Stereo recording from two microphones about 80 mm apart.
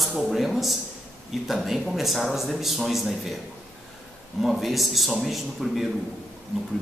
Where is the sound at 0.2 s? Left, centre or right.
Centre.